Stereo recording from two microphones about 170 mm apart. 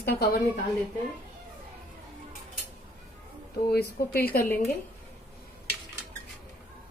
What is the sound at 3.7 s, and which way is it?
Speech, 65° left (ahead or behind).